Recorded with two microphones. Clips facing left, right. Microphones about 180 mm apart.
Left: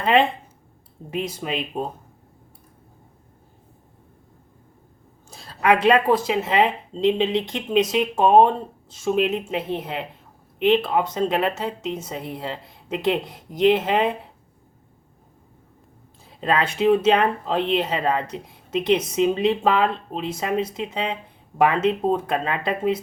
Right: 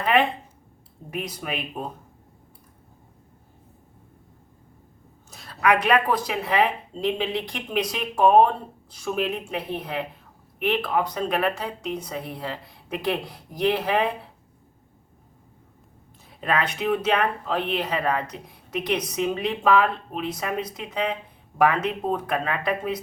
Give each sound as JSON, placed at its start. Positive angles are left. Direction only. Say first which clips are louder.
{"t": 0.0, "sound": "speech", "louder": "left 3 dB", "side_deg": 25}
{"t": 5.3, "sound": "speech", "louder": "left 2 dB", "side_deg": 30}
{"t": 16.4, "sound": "speech", "louder": "left 4 dB", "side_deg": 30}